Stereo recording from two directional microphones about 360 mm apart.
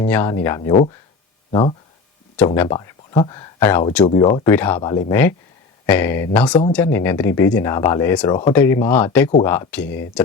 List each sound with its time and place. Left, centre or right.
0.0 s speech: centre
2.6 s speech: centre